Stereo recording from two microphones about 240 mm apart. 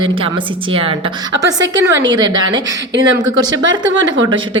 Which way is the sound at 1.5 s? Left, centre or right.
Centre.